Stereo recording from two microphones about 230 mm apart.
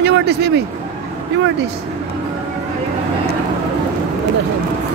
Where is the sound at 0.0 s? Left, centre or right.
Right.